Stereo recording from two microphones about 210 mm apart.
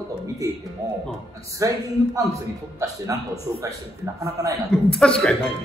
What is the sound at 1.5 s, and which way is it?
A man's voice, 15° right (ahead or behind).